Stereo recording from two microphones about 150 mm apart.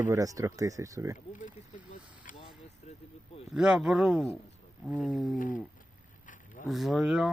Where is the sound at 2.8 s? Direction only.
45° left (ahead or behind).